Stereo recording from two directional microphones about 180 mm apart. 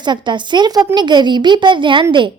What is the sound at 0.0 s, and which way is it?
A woman's voice, 25° right (ahead or behind).